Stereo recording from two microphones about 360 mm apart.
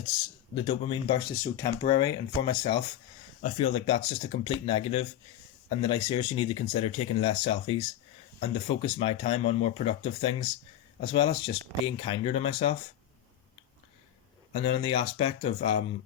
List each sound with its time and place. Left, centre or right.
0.5 s speech: centre
14.5 s speech: centre